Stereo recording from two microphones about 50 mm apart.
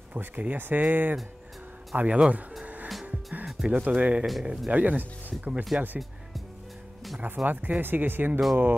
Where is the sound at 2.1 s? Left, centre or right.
Right.